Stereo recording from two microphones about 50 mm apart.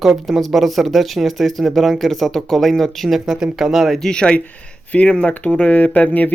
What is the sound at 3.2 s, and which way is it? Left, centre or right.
Speech, centre.